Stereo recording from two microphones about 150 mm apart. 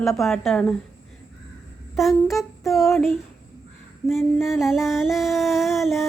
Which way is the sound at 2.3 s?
Centre (ahead or behind).